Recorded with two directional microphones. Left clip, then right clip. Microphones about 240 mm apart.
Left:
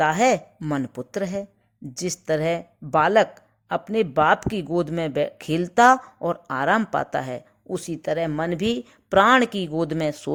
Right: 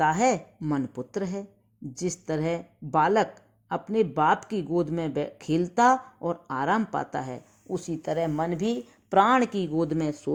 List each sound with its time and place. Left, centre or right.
0.0 s a woman's voice: left